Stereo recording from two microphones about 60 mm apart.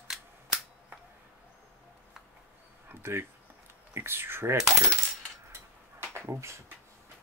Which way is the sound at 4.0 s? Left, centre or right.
Right.